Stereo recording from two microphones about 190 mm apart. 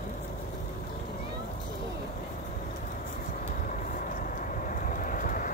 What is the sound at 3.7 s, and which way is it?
Vehicle, 45° left (ahead or behind).